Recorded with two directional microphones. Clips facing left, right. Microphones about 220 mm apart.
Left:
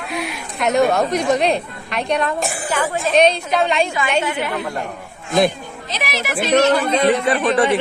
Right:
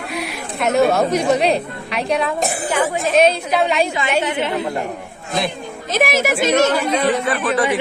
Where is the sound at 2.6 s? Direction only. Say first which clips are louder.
Right 2 dB; 20° right (ahead or behind).